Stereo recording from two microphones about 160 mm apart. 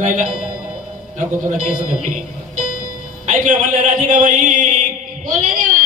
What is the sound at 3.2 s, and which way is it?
A man's voice, 55° right (ahead or behind).